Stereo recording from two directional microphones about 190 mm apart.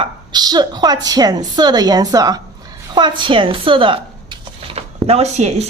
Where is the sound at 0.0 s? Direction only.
20° right (ahead or behind).